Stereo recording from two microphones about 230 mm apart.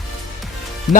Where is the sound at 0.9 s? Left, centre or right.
Centre.